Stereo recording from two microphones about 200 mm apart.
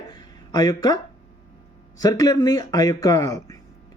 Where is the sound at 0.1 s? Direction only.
20° left (ahead or behind).